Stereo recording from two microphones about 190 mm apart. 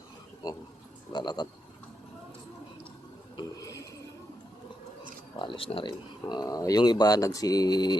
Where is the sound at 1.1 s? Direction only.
20° left (ahead or behind).